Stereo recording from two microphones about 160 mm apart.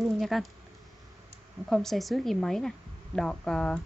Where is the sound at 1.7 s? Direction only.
Centre (ahead or behind).